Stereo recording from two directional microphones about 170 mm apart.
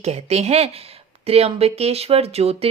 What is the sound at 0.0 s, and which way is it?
Speech, 40° right (ahead or behind).